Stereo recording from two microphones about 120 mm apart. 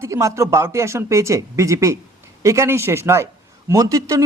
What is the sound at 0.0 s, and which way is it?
Speech, 25° right (ahead or behind).